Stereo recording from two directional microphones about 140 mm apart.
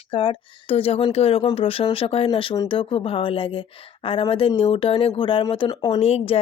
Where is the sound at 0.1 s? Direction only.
40° left (ahead or behind).